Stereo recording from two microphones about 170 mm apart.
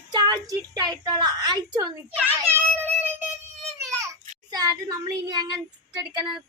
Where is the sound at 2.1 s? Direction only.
10° right (ahead or behind).